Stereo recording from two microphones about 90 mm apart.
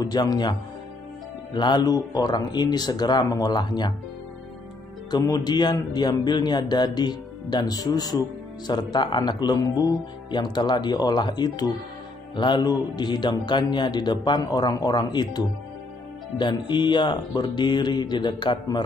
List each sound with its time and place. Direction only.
0.0 s a man's voice: 50° left (ahead or behind)
5.1 s a man's voice: 50° left (ahead or behind)